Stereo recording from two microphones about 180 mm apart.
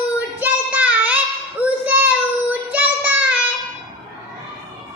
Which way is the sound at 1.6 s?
10° right (ahead or behind).